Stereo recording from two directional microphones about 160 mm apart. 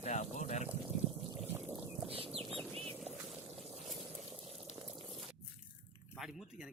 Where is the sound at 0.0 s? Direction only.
45° left (ahead or behind).